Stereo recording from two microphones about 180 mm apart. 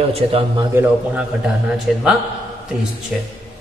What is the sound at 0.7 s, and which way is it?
A man's voice, 10° right (ahead or behind).